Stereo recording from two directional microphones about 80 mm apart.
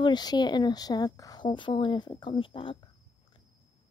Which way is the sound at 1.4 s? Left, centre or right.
Left.